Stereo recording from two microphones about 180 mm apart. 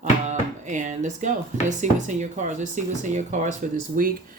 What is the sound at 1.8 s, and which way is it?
Speech, 45° right (ahead or behind).